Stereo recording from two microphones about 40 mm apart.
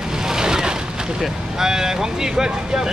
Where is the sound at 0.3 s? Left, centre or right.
Centre.